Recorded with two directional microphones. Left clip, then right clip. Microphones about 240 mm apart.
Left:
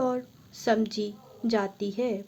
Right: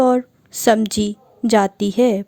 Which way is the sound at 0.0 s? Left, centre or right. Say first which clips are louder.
Right 13 dB; right.